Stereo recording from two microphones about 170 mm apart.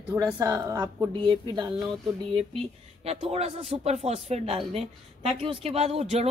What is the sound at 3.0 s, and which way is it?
Speech, 35° right (ahead or behind).